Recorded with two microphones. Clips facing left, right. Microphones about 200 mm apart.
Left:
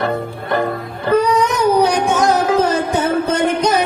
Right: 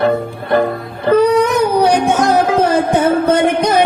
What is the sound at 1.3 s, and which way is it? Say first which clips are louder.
Music: right 2 dB; 55° right (ahead or behind).